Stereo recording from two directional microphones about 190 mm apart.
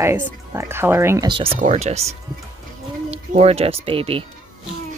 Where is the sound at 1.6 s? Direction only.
35° right (ahead or behind).